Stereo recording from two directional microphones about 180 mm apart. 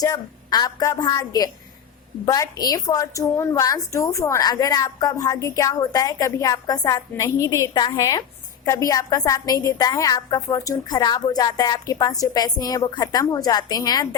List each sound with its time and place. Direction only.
0.0 s a woman's voice: 20° left (ahead or behind)